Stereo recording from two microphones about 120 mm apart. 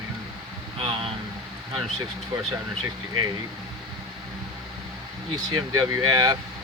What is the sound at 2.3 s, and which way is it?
Speech, 35° right (ahead or behind).